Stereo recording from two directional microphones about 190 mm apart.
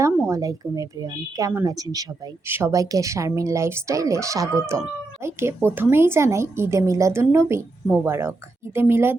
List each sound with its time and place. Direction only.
0.0 s a woman's voice: 15° right (ahead or behind)